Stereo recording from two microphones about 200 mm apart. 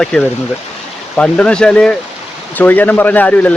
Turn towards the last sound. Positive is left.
turn(degrees=10)  # may be behind; listen again after turning